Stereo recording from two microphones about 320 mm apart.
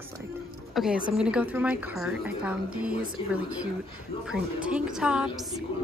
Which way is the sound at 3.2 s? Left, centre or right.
Centre.